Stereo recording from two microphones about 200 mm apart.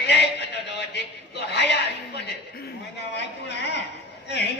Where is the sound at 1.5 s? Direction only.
60° left (ahead or behind).